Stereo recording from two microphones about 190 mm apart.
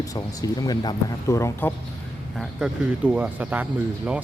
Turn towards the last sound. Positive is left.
turn(degrees=-5)  # may be behind; listen again after turning